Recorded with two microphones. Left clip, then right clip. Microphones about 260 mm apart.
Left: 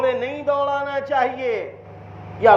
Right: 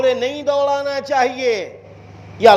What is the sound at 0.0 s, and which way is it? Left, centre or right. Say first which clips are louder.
A man's voice: right 4 dB; right.